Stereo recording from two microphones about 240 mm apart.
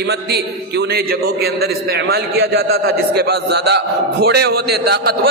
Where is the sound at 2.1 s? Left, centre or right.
Right.